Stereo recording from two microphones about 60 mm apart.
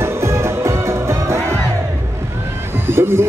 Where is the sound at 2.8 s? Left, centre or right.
Right.